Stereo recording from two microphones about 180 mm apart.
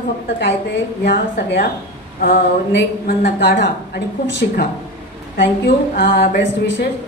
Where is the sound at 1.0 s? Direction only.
70° left (ahead or behind).